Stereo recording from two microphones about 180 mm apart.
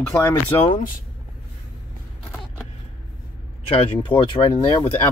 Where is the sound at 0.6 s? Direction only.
50° left (ahead or behind).